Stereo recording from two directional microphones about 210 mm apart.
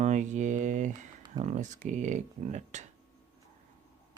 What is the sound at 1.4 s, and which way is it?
Speech, 35° right (ahead or behind).